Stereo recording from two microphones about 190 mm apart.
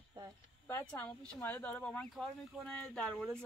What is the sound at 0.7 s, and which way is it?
Speech, 10° left (ahead or behind).